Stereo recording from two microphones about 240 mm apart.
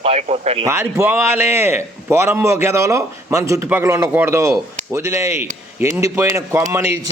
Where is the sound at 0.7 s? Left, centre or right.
Centre.